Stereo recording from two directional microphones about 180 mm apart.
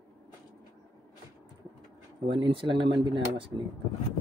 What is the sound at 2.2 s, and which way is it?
Speech, 30° right (ahead or behind).